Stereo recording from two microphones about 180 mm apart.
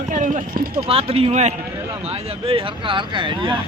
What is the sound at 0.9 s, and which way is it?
Speech, 35° right (ahead or behind).